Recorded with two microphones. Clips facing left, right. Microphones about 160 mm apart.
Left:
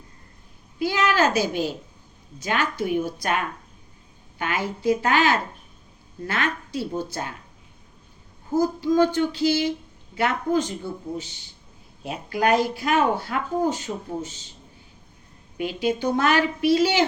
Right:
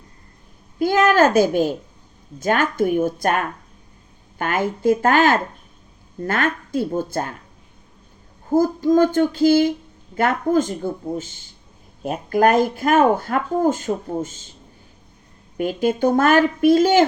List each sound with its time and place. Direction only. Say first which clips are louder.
0.8 s a sound: right 6 dB; 50° right (ahead or behind)
2.4 s speech: right 6 dB; 50° right (ahead or behind)
8.4 s speech: right 5 dB; 50° right (ahead or behind)
15.5 s speech: right 4 dB; 50° right (ahead or behind)